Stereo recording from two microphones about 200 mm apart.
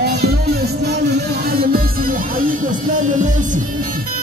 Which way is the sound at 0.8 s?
50° right (ahead or behind).